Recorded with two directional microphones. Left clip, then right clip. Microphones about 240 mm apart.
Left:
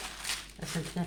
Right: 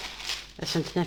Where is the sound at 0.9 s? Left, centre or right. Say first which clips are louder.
Right 12 dB; right.